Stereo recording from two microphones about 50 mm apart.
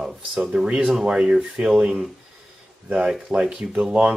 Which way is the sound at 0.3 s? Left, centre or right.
Centre.